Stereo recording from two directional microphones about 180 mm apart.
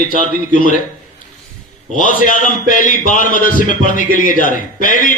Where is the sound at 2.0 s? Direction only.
45° left (ahead or behind).